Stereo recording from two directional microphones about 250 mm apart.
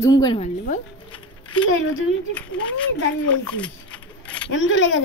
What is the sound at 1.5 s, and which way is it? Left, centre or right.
Speech, left.